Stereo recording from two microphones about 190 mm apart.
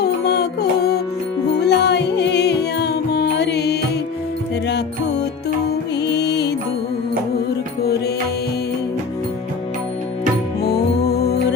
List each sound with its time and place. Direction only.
0.0 s music: 60° left (ahead or behind)
6.0 s music: 60° left (ahead or behind)
10.6 s music: 55° left (ahead or behind)